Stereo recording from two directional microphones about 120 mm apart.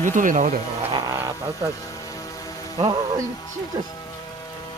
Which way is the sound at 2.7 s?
30° right (ahead or behind).